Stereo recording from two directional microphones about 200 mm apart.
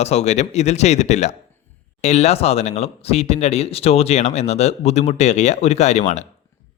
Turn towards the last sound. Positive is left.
turn(degrees=35)  # may be behind; listen again after turning